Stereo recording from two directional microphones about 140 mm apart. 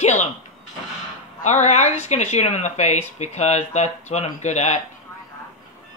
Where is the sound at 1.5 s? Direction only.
55° left (ahead or behind).